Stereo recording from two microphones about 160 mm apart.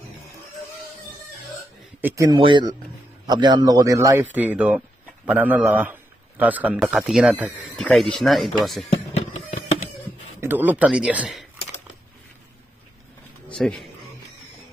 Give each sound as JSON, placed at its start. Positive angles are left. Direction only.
{"t": 2.0, "sound": "a sound", "side_deg": -10}
{"t": 2.2, "sound": "speech", "side_deg": -30}
{"t": 7.7, "sound": "speech", "side_deg": 5}
{"t": 8.9, "sound": "a sound", "side_deg": 45}
{"t": 10.4, "sound": "speech", "side_deg": -10}
{"t": 13.5, "sound": "speech", "side_deg": 5}